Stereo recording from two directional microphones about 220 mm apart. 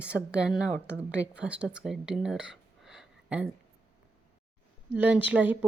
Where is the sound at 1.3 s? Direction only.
5° right (ahead or behind).